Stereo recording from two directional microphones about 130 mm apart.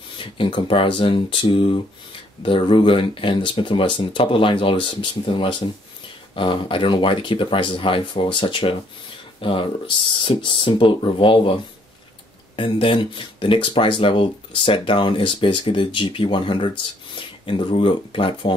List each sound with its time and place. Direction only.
0.2 s speech: 40° left (ahead or behind)